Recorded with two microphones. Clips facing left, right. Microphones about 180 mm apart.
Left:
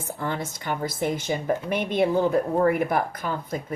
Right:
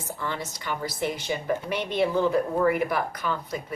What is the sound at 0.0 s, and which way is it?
Speech, 55° left (ahead or behind).